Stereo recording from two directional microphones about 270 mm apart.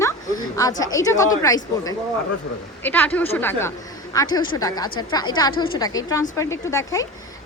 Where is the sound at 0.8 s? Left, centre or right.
Centre.